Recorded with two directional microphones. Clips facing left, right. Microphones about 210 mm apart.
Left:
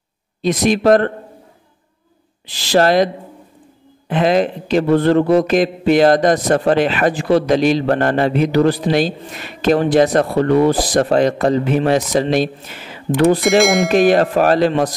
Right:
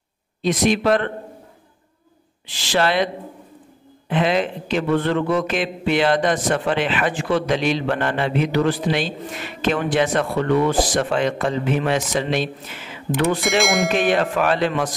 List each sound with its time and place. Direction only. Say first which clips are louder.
0.4 s a man's voice: left 3 dB; 40° left (ahead or behind)
2.4 s a man's voice: left 6 dB; 35° left (ahead or behind)
4.1 s a man's voice: left 5 dB; 40° left (ahead or behind)
13.4 s speech: left 6 dB; centre (ahead or behind)
13.9 s a man's voice: left 7 dB; 40° left (ahead or behind)